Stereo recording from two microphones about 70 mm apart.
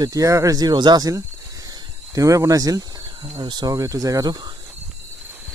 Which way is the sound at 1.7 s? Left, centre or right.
Right.